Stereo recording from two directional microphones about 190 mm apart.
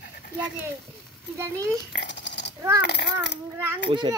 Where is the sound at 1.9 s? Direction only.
65° left (ahead or behind).